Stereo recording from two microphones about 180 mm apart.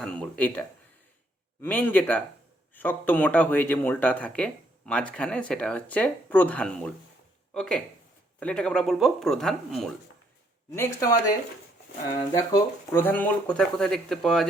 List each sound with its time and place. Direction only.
0.0 s speech: 5° left (ahead or behind)
1.6 s speech: 10° left (ahead or behind)
10.7 s speech: 15° left (ahead or behind)